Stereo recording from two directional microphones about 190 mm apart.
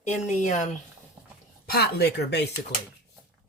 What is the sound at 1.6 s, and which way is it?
Speech, 55° left (ahead or behind).